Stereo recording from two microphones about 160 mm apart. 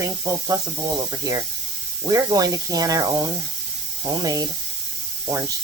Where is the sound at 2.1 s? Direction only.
20° right (ahead or behind).